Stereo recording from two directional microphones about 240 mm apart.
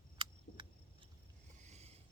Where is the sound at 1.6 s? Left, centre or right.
Right.